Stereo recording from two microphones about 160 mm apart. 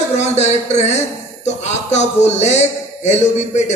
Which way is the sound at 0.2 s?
45° left (ahead or behind).